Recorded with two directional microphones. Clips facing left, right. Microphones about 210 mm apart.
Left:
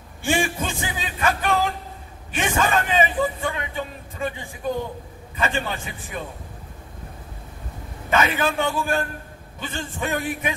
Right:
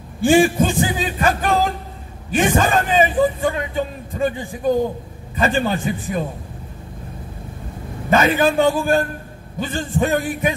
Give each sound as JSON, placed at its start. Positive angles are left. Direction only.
{"t": 0.2, "sound": "a man's voice", "side_deg": -35}
{"t": 8.1, "sound": "a man's voice", "side_deg": -35}